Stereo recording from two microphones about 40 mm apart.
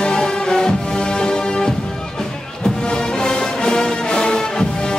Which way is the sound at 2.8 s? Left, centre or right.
Centre.